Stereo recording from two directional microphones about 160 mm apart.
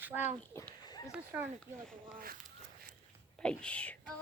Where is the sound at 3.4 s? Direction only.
5° left (ahead or behind).